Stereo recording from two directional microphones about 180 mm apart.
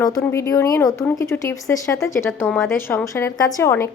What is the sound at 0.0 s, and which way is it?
Speech, 15° left (ahead or behind).